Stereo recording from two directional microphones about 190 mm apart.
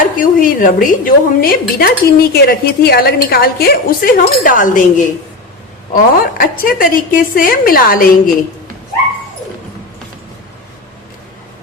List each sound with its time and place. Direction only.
0.0 s a woman's voice: 45° left (ahead or behind)